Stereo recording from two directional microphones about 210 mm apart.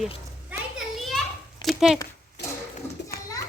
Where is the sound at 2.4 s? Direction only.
55° left (ahead or behind).